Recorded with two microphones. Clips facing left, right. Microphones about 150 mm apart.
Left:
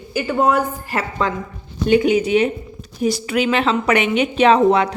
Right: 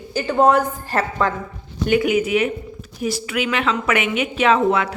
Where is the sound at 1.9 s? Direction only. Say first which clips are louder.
Left 3 dB; 30° left (ahead or behind).